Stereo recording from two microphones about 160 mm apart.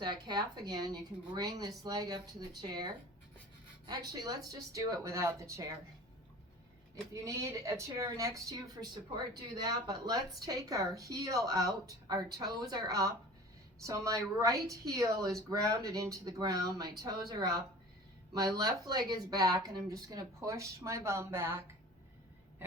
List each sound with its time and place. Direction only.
0.0 s a woman's voice: 25° right (ahead or behind)
6.9 s a woman's voice: 20° right (ahead or behind)